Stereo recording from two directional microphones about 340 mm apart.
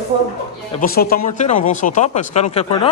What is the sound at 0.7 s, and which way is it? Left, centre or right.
A man's voice, left.